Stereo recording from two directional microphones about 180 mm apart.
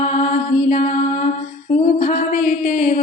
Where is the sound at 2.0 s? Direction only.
45° left (ahead or behind).